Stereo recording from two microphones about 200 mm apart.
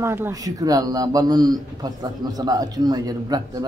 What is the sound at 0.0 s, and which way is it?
Speech, 10° right (ahead or behind).